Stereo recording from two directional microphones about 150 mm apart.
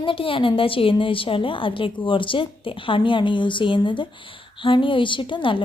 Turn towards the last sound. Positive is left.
turn(degrees=35)  # may be behind; listen again after turning